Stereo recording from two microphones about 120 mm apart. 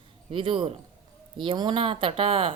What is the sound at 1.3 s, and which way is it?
Speech, 40° right (ahead or behind).